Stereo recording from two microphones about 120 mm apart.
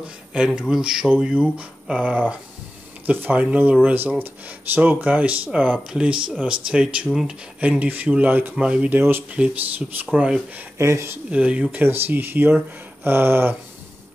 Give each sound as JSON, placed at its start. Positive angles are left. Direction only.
{"t": 0.3, "sound": "speech", "side_deg": -5}
{"t": 10.8, "sound": "speech", "side_deg": -25}
{"t": 11.2, "sound": "speech", "side_deg": -10}